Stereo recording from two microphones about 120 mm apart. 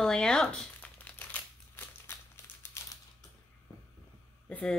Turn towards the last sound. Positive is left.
turn(degrees=10)  # may be behind; listen again after turning